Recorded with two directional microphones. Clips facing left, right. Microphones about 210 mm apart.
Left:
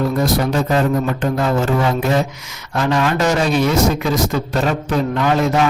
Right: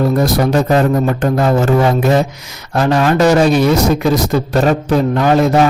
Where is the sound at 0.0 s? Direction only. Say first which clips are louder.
Right 4 dB; 40° right (ahead or behind).